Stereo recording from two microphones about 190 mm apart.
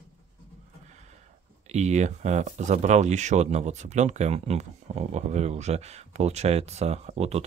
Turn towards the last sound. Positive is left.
turn(degrees=-35)  # may be behind; listen again after turning